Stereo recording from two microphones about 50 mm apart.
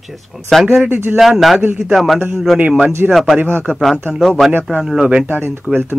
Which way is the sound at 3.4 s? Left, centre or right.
Right.